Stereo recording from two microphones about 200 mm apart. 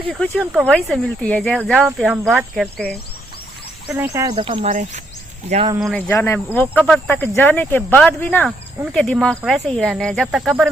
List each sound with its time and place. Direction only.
0.1 s speech: centre (ahead or behind)
3.8 s speech: 10° right (ahead or behind)
4.4 s speech: 25° right (ahead or behind)
5.8 s speech: 5° left (ahead or behind)